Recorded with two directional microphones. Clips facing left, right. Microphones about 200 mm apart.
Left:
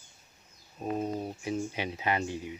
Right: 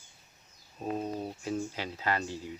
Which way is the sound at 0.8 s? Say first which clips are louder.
Left 2 dB; 10° left (ahead or behind).